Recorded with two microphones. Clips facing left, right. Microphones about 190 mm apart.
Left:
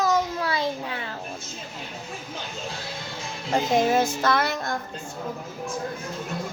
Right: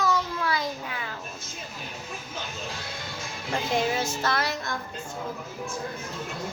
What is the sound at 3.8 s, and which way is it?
Music, 50° left (ahead or behind).